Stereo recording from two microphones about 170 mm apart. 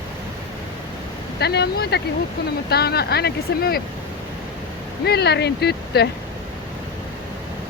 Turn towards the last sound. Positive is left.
turn(degrees=75)  # may be behind; listen again after turning